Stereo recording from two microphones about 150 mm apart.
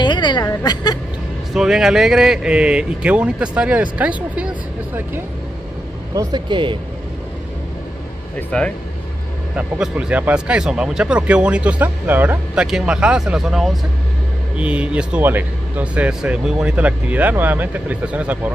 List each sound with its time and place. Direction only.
0.0 s speech: 30° left (ahead or behind)
1.5 s speech: 5° right (ahead or behind)
6.1 s speech: 30° right (ahead or behind)
8.4 s speech: 10° left (ahead or behind)
9.6 s speech: 5° right (ahead or behind)